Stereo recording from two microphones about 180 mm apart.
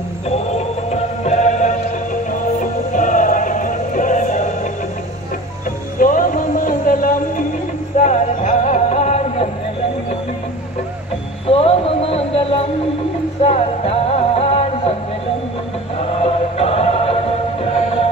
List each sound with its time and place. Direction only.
0.3 s music: 35° left (ahead or behind)
2.9 s music: 45° left (ahead or behind)
5.9 s a sound: 50° left (ahead or behind)
8.0 s music: 40° left (ahead or behind)
11.4 s a sound: 30° left (ahead or behind)
13.4 s music: 35° left (ahead or behind)
16.0 s music: 35° left (ahead or behind)